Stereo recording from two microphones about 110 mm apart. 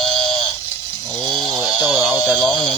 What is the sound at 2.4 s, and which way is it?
Speech, 50° left (ahead or behind).